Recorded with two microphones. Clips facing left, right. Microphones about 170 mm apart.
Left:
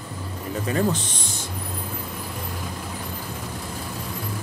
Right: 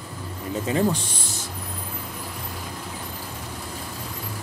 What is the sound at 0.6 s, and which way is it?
Speech, 20° right (ahead or behind).